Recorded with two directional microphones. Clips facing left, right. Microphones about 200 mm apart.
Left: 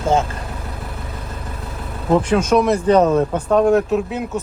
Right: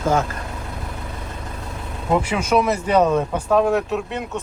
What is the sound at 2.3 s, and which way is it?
Speech, 10° right (ahead or behind).